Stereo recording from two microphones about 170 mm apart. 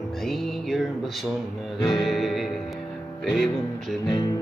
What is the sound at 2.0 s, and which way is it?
Music, centre (ahead or behind).